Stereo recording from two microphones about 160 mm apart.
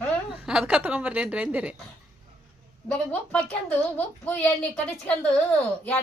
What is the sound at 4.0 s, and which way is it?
Child singing, 10° left (ahead or behind).